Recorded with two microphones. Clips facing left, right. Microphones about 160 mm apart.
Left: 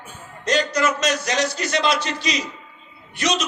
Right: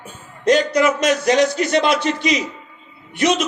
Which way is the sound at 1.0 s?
55° right (ahead or behind).